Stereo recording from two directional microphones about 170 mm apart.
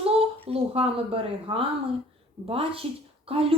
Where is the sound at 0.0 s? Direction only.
35° right (ahead or behind).